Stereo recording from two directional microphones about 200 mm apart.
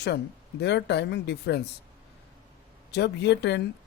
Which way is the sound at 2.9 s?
55° left (ahead or behind).